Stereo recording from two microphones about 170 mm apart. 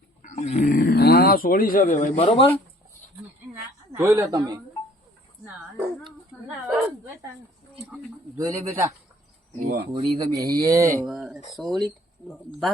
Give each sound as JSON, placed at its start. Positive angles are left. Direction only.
{"t": 0.2, "sound": "a sound", "side_deg": 45}
{"t": 1.9, "sound": "a man's voice", "side_deg": 45}
{"t": 3.9, "sound": "speech", "side_deg": -15}
{"t": 5.5, "sound": "a woman's voice", "side_deg": -10}
{"t": 8.4, "sound": "speech", "side_deg": -20}
{"t": 9.9, "sound": "speech", "side_deg": -20}
{"t": 11.0, "sound": "speech", "side_deg": -5}